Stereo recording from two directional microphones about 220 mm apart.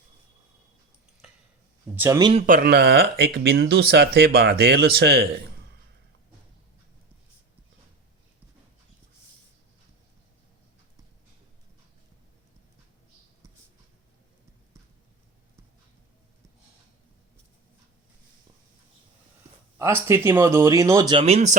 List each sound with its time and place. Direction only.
2.0 s speech: 15° right (ahead or behind)
2.3 s speech: 40° right (ahead or behind)
19.8 s speech: 10° right (ahead or behind); by 21.5 s 30° right (ahead or behind)